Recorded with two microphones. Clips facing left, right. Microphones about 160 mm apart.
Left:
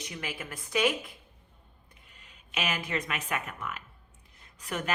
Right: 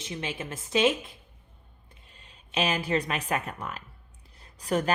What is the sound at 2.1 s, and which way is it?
Speech, 30° right (ahead or behind).